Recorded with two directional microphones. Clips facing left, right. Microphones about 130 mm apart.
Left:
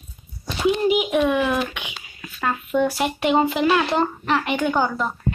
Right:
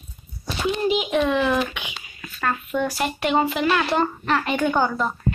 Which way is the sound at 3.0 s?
15° left (ahead or behind).